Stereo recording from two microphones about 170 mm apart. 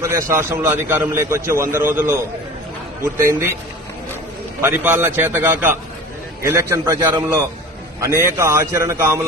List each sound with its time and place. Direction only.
0.0 s a man's voice: 15° right (ahead or behind)
4.6 s a man's voice: 15° right (ahead or behind)